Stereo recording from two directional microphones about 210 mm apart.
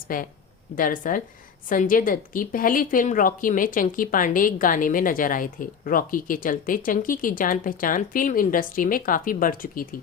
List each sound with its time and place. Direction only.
0.1 s a woman's voice: 40° left (ahead or behind)